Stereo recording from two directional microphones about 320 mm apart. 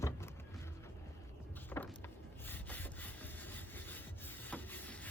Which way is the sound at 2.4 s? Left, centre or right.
Centre.